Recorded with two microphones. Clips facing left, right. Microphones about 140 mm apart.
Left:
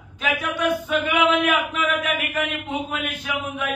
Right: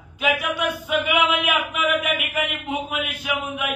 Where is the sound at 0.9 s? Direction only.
10° right (ahead or behind).